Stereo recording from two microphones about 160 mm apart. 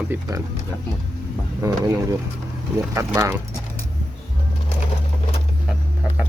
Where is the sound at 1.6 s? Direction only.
20° right (ahead or behind).